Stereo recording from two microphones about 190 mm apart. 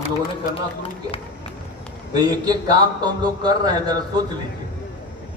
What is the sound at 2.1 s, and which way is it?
A man's voice, 20° right (ahead or behind).